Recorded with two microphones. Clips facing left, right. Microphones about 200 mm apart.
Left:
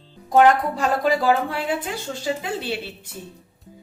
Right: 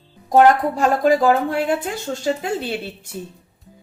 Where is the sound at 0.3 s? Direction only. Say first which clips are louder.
Right 2 dB; 40° right (ahead or behind).